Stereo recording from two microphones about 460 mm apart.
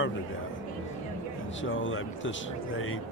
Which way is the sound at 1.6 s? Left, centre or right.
Left.